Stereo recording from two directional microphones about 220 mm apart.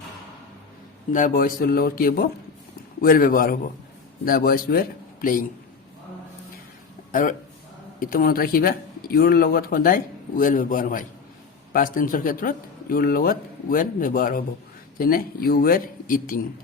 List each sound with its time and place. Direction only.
1.1 s speech: 40° left (ahead or behind)
7.1 s speech: 35° left (ahead or behind)